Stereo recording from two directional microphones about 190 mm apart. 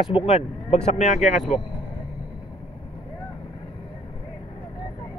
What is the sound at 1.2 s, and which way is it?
Speech, centre (ahead or behind).